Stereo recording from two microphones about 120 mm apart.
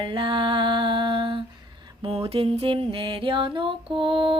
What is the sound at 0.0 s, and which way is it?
Mantra, 45° right (ahead or behind).